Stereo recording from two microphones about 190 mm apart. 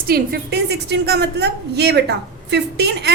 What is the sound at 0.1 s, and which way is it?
A woman's voice, 55° right (ahead or behind).